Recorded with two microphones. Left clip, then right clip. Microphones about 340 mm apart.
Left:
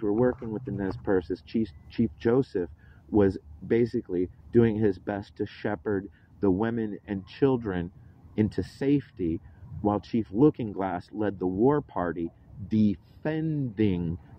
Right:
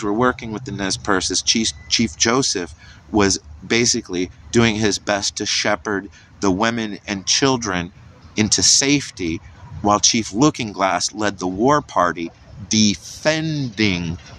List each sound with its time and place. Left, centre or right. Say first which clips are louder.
0.0 s speech: right 7 dB; left
9.8 s speech: right 12 dB; left